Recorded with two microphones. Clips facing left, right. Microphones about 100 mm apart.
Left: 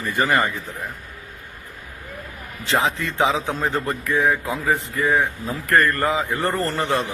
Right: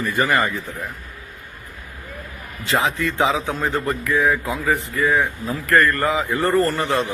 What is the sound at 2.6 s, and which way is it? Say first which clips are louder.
Speech: right 1 dB; 20° left (ahead or behind).